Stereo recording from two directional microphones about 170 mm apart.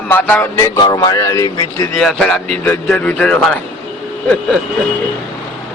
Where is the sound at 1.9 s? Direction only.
5° left (ahead or behind).